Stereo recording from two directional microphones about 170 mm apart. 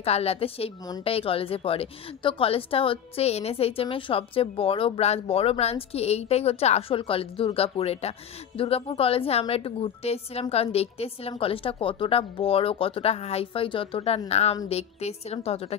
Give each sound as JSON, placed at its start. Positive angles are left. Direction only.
{"t": 0.0, "sound": "a woman's voice", "side_deg": 35}